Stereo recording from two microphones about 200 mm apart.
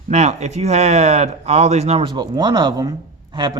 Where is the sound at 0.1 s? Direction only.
35° right (ahead or behind).